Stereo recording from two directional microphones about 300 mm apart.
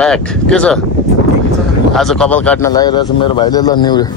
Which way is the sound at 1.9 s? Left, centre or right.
Centre.